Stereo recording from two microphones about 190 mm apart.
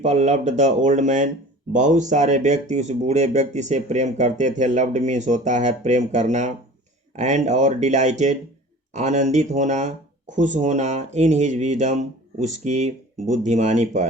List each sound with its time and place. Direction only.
0.0 s speech: 35° right (ahead or behind)